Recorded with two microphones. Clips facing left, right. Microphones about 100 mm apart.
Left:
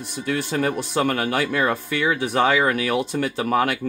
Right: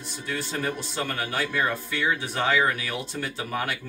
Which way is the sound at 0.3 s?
65° left (ahead or behind).